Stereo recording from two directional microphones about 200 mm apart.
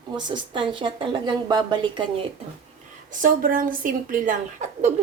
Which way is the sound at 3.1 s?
40° right (ahead or behind).